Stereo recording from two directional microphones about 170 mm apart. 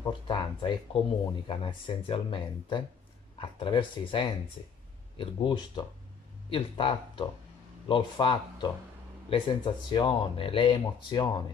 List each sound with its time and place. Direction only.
0.0 s speech: 25° left (ahead or behind)